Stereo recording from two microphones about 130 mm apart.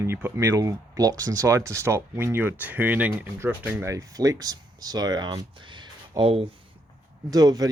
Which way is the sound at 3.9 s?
25° right (ahead or behind).